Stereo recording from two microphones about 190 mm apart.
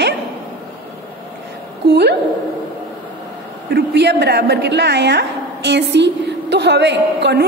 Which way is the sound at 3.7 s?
65° right (ahead or behind).